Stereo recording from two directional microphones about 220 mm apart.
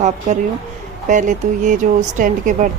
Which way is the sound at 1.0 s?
35° right (ahead or behind).